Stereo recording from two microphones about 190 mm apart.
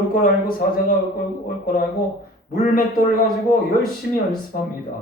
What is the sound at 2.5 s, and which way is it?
Speech, 55° left (ahead or behind).